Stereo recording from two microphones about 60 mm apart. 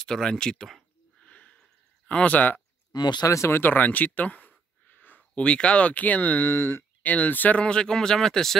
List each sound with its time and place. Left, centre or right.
0.0 s speech: centre
1.2 s a sound: left
2.0 s speech: left
3.3 s speech: left
3.5 s a sound: left
5.4 s speech: centre
7.6 s speech: centre